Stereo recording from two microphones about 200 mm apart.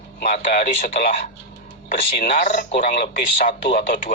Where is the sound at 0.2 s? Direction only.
50° left (ahead or behind).